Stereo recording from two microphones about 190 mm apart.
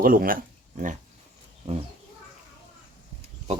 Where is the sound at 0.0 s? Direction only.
50° right (ahead or behind).